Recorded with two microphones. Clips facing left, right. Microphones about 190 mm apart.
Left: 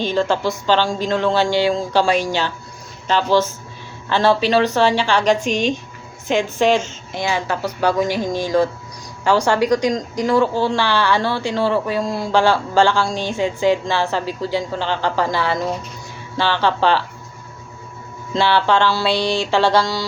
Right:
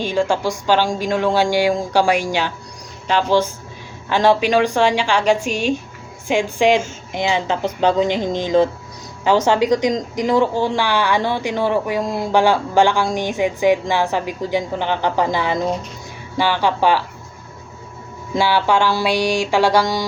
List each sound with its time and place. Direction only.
0.0 s a woman's voice: 10° right (ahead or behind)
18.3 s speech: 10° right (ahead or behind)